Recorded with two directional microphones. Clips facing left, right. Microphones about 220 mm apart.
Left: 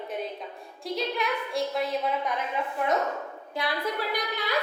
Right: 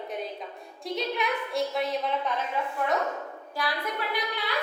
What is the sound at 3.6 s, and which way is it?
Speech, 25° left (ahead or behind).